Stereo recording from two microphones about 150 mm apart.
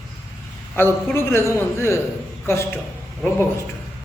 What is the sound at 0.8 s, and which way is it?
A man's voice, 15° left (ahead or behind).